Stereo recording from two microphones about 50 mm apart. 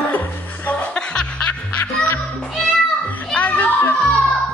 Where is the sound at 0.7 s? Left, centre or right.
Centre.